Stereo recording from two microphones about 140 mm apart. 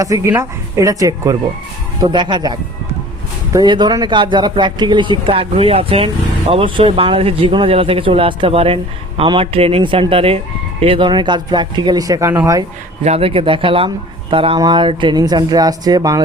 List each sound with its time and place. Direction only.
0.0 s speech: 20° right (ahead or behind)
13.1 s speech: 45° right (ahead or behind); by 16.2 s 25° right (ahead or behind)